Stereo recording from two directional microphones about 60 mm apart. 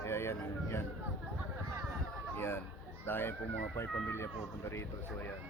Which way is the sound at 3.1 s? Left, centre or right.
Left.